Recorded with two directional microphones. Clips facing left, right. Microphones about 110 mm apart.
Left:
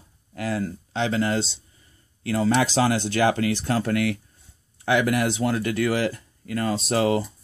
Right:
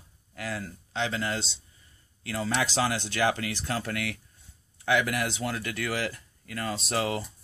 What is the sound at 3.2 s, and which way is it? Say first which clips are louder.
Speech: left 5 dB; 50° left (ahead or behind).